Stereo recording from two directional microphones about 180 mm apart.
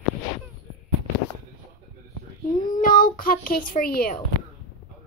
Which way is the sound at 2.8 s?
50° left (ahead or behind).